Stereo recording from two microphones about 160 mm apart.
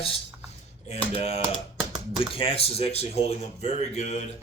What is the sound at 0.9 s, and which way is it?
Speech, 40° left (ahead or behind).